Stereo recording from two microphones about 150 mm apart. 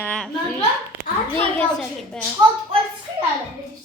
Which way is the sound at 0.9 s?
15° right (ahead or behind).